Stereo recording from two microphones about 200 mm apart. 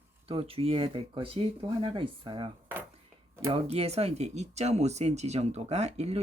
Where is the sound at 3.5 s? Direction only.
30° right (ahead or behind).